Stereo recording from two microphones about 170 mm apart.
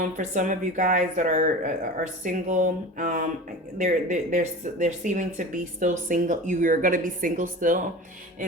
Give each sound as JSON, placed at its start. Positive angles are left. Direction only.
{"t": 0.0, "sound": "speech", "side_deg": -50}